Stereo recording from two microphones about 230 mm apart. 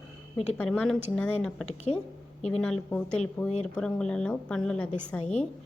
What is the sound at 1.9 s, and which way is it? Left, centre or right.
Speech, left.